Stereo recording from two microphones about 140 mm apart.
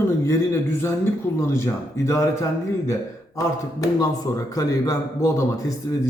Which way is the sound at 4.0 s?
25° left (ahead or behind).